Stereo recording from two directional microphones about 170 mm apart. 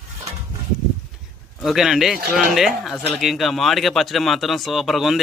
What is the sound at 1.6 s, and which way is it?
A man's voice, centre (ahead or behind).